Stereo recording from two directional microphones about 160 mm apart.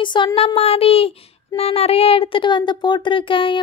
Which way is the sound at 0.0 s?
30° left (ahead or behind).